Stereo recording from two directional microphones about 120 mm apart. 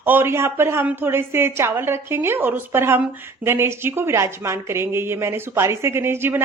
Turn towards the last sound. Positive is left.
turn(degrees=-20)  # may be behind; listen again after turning